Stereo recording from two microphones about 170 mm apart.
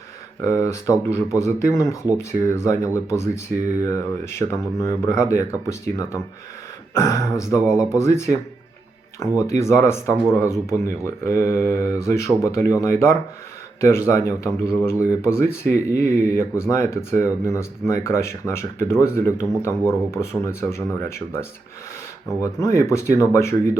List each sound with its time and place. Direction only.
0.4 s speech: 20° left (ahead or behind)